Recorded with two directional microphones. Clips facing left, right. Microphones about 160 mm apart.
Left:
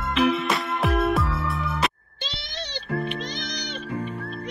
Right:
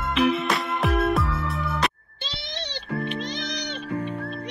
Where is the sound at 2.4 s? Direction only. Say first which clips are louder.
Right 2 dB; 25° right (ahead or behind).